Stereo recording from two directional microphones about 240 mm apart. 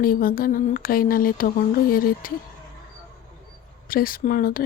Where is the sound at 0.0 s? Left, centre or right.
Left.